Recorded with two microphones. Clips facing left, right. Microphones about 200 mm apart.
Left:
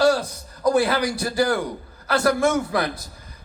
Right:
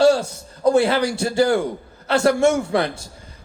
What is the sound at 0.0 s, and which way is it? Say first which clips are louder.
A man's voice: right 3 dB; 25° right (ahead or behind).